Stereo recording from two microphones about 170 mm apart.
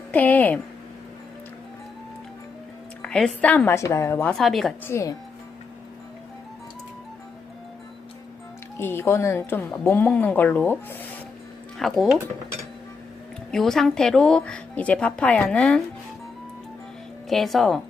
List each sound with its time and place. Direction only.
0.1 s a woman's voice: 10° left (ahead or behind)
3.0 s a woman's voice: 5° left (ahead or behind)
4.4 s speech: centre (ahead or behind)
4.9 s a woman's voice: 15° left (ahead or behind)
8.8 s a woman's voice: 15° left (ahead or behind)
11.8 s speech: centre (ahead or behind)
13.5 s speech: centre (ahead or behind)
17.2 s speech: centre (ahead or behind)